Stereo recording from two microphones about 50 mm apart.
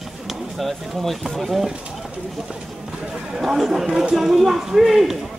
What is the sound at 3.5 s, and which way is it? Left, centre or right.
Speech, centre.